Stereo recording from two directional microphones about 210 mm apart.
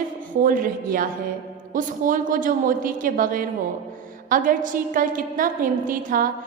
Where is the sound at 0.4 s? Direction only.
40° right (ahead or behind).